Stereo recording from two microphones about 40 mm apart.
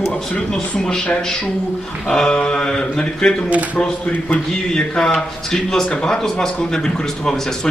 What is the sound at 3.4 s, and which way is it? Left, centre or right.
Speech, right.